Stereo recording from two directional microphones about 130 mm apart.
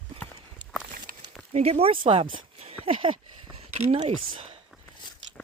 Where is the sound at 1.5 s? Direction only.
55° right (ahead or behind).